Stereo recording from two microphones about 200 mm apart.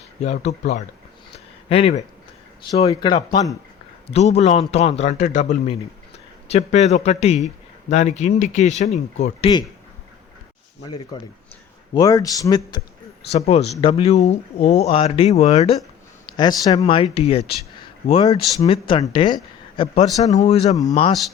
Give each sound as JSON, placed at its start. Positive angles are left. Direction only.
{"t": 0.2, "sound": "speech", "side_deg": 35}
{"t": 1.7, "sound": "speech", "side_deg": 30}
{"t": 10.8, "sound": "speech", "side_deg": 20}
{"t": 13.3, "sound": "speech", "side_deg": 30}
{"t": 16.2, "sound": "speech", "side_deg": 20}